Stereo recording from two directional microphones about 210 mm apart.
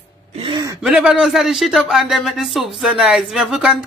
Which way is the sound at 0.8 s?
5° right (ahead or behind).